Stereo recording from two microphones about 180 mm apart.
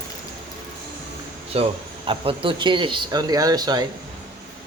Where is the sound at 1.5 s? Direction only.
35° right (ahead or behind).